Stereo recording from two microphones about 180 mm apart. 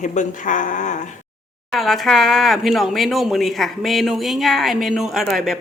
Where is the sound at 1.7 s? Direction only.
Centre (ahead or behind).